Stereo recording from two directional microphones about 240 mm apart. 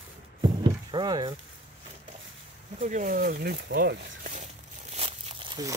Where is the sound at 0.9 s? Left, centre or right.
Centre.